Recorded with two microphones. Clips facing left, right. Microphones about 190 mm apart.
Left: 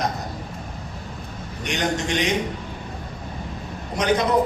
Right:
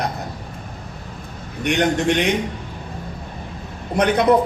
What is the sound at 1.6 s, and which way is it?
Speech, 60° right (ahead or behind).